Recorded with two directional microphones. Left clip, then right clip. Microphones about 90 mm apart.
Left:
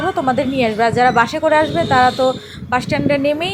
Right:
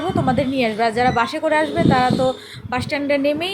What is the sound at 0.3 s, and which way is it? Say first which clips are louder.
A woman's voice: left 2 dB; 25° left (ahead or behind).